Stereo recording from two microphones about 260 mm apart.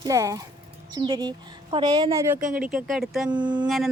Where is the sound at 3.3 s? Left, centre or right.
Centre.